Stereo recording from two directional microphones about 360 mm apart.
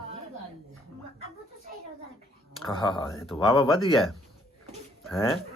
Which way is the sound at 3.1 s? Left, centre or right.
Centre.